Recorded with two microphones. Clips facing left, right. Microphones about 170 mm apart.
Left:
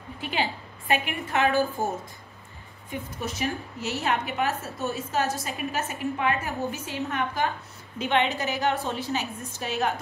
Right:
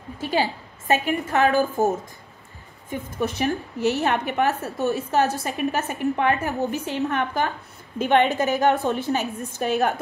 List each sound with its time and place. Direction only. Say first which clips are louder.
0.2 s a woman's voice: right 6 dB; 40° right (ahead or behind)
2.9 s a woman's voice: right 6 dB; 60° right (ahead or behind)